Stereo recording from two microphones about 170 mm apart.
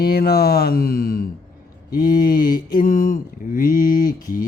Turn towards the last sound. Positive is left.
turn(degrees=55)  # may be behind; listen again after turning